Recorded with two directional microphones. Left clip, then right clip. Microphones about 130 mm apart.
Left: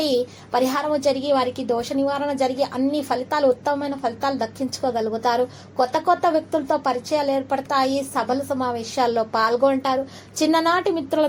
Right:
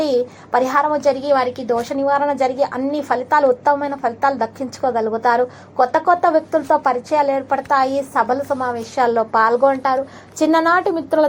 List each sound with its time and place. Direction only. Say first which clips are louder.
0.0 s a woman's voice: right 4 dB; 20° left (ahead or behind)